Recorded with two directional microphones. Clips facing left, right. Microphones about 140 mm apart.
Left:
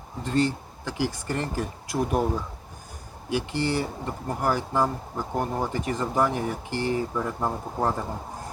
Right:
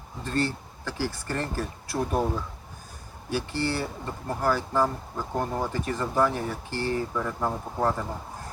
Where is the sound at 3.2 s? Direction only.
15° left (ahead or behind).